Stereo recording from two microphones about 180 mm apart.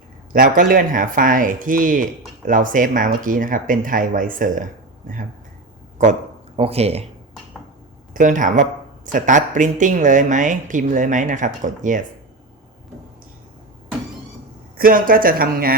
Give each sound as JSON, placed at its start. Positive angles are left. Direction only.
{"t": 0.3, "sound": "speech", "side_deg": -50}
{"t": 8.1, "sound": "speech", "side_deg": -45}
{"t": 14.8, "sound": "speech", "side_deg": -50}